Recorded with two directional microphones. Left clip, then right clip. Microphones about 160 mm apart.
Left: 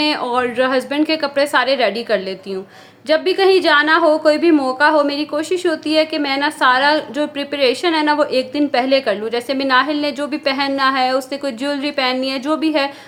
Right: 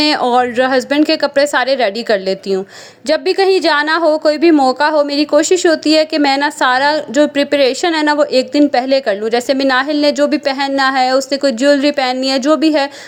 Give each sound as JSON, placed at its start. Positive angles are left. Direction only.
{"t": 0.0, "sound": "a woman's voice", "side_deg": -45}